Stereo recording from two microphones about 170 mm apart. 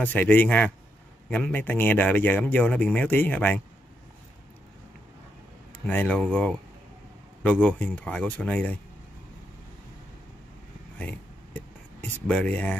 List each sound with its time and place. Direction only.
0.0 s speech: 10° left (ahead or behind)
5.9 s speech: 10° left (ahead or behind)
11.0 s a sound: 10° left (ahead or behind)
12.3 s speech: 5° left (ahead or behind)